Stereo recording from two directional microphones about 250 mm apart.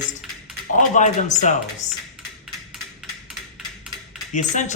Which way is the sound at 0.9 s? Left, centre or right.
Left.